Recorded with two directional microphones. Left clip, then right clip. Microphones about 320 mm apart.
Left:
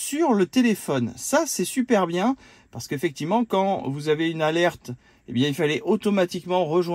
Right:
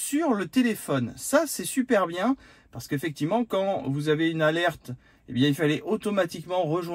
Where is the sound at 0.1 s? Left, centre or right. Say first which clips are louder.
Left 4 dB; left.